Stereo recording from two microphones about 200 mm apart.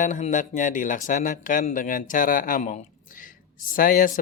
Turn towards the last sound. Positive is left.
turn(degrees=45)  # may be behind; listen again after turning